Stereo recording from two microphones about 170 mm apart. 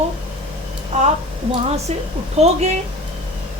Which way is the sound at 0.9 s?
45° right (ahead or behind).